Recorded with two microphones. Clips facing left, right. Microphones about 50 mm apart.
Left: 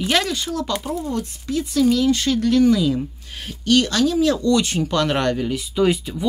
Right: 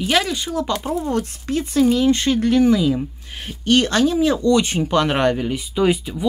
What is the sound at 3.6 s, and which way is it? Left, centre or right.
Speech, right.